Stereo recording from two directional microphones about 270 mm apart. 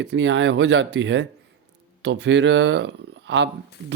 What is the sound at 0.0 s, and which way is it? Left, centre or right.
Speech, right.